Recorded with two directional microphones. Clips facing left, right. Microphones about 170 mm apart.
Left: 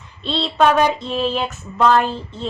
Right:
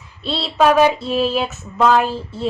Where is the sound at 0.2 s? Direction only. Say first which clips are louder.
Even; 5° right (ahead or behind).